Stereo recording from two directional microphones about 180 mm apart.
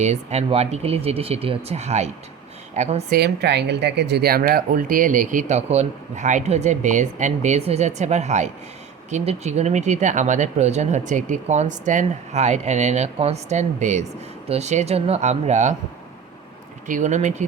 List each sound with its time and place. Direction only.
0.0 s speech: 40° right (ahead or behind)
3.2 s speech: 65° right (ahead or behind); by 15.7 s 40° right (ahead or behind)
16.8 s speech: 45° right (ahead or behind)